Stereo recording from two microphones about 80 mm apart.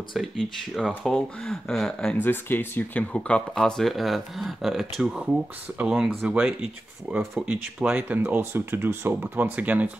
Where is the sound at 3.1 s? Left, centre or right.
Centre.